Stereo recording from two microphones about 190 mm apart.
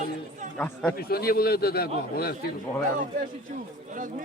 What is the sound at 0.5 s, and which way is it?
Speech, 5° left (ahead or behind).